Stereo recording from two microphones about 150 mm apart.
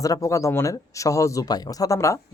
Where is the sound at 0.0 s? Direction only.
20° left (ahead or behind).